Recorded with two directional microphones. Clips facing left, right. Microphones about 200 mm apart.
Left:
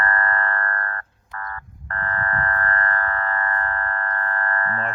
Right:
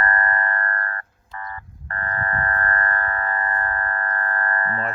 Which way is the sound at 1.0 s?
15° right (ahead or behind).